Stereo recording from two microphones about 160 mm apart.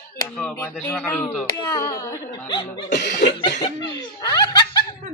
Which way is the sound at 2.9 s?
90° left.